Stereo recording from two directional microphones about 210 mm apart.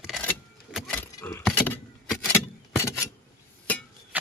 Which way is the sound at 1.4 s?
10° left (ahead or behind).